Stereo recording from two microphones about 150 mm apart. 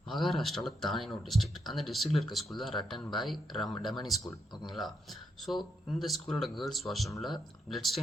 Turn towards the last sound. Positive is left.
turn(degrees=0)  # may be behind; listen again after turning